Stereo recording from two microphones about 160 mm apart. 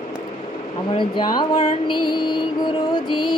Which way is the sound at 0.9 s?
30° left (ahead or behind).